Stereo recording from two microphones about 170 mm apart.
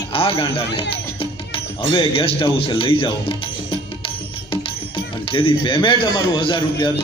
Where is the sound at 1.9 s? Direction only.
30° left (ahead or behind).